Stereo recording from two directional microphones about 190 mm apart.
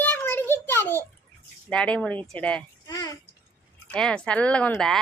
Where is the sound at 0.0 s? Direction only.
10° left (ahead or behind).